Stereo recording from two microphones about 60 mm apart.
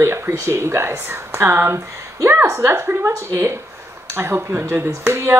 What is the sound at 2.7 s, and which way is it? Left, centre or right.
Speech, right.